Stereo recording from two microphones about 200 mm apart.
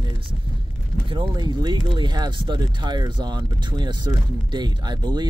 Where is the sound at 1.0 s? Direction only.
20° right (ahead or behind).